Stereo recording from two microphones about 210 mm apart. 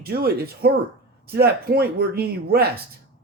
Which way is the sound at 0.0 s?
45° right (ahead or behind).